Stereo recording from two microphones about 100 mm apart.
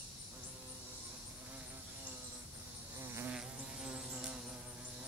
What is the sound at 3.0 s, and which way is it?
Insect, 25° right (ahead or behind).